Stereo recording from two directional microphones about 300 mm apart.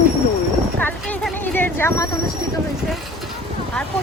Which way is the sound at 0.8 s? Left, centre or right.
Centre.